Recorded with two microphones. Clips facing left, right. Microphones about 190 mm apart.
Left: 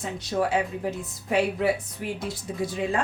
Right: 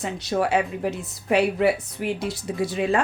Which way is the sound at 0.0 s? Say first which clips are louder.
Right 2 dB; 75° right (ahead or behind).